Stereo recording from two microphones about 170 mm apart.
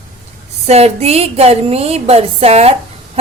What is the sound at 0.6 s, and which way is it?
A woman's voice, 40° right (ahead or behind).